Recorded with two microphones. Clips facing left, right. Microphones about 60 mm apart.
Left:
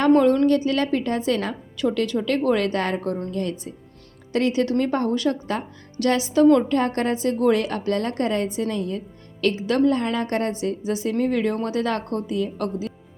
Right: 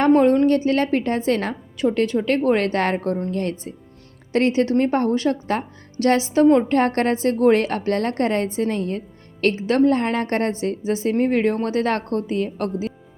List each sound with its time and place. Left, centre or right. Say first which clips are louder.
0.0 s speech: right 1 dB; right
1.7 s speech: right 3 dB; right
4.3 s speech: right 3 dB; right
6.7 s a woman's voice: right 3 dB; right